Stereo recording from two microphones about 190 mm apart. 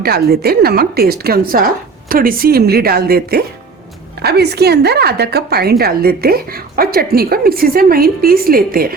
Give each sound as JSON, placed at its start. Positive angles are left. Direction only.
{"t": 0.0, "sound": "a woman's voice", "side_deg": -55}